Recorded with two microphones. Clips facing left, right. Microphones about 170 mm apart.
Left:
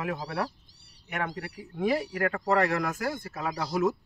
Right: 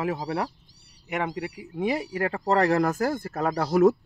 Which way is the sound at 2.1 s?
30° right (ahead or behind).